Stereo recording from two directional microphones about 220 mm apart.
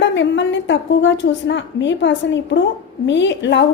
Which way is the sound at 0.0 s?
55° left (ahead or behind).